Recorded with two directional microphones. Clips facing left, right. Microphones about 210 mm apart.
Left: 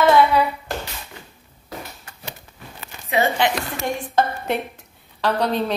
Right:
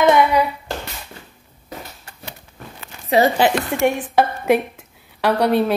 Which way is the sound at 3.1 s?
35° right (ahead or behind).